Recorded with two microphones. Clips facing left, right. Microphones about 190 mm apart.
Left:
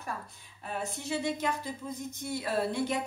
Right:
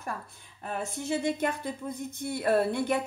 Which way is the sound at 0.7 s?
50° right (ahead or behind).